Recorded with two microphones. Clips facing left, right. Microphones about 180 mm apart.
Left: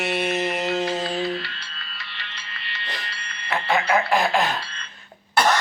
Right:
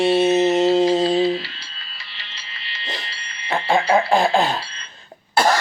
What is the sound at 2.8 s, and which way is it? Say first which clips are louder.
Insect: right 4 dB; 30° right (ahead or behind).